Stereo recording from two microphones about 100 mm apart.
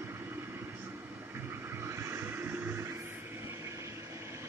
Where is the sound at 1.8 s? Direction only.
30° right (ahead or behind).